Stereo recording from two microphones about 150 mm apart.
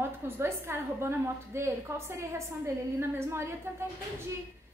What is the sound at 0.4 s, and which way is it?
A woman's voice, 15° right (ahead or behind).